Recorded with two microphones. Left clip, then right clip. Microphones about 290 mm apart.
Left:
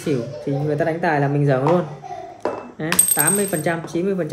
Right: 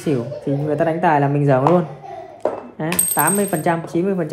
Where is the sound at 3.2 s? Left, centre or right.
Centre.